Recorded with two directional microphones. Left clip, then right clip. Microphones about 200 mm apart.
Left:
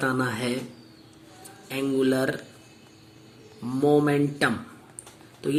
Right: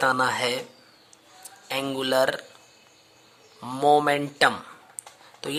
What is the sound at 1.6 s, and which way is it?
Speech, 40° right (ahead or behind).